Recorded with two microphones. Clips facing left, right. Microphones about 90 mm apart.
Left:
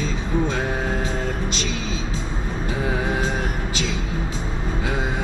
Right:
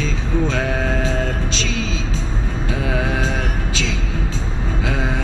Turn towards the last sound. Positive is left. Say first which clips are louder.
# right 2 dB
turn(degrees=-80)